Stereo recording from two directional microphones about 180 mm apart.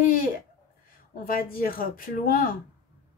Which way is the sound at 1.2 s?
50° left (ahead or behind).